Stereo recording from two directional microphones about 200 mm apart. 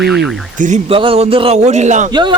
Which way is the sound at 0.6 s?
35° right (ahead or behind).